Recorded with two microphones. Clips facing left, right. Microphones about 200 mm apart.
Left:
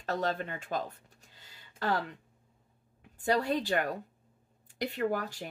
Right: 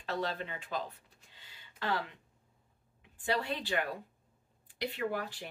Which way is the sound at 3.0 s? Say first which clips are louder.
Left 5 dB; 40° left (ahead or behind).